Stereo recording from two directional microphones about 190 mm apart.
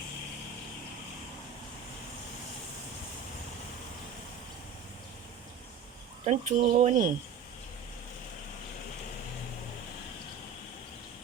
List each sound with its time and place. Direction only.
6.2 s speech: 35° right (ahead or behind)